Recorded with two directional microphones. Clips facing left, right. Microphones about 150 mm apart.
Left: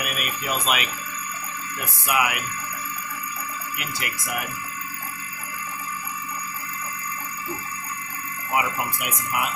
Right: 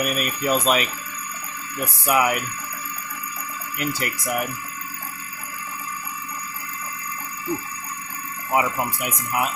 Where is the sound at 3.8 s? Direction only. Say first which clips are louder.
Right 9 dB; 40° right (ahead or behind).